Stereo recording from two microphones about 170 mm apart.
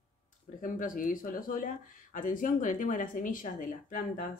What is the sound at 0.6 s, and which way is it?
Speech, 50° left (ahead or behind).